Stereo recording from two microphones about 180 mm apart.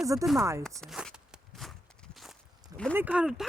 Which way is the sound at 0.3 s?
15° right (ahead or behind).